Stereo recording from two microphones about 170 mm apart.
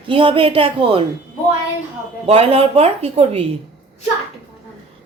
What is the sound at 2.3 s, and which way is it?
A woman's voice, 35° right (ahead or behind).